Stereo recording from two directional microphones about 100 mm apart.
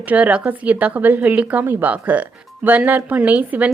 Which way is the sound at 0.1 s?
15° right (ahead or behind).